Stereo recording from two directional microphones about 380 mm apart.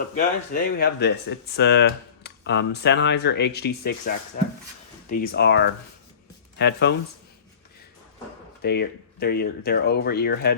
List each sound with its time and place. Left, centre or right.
0.2 s speech: left
5.2 s speech: left
8.6 s speech: left